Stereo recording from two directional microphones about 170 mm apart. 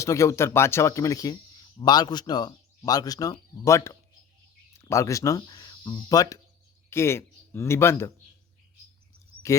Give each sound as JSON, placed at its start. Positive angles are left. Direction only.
{"t": 0.0, "sound": "a man's voice", "side_deg": 15}